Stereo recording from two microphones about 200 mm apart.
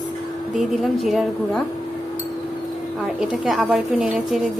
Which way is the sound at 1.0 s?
Centre (ahead or behind).